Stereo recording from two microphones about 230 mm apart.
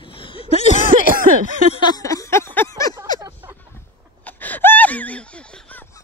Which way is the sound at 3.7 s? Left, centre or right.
Centre.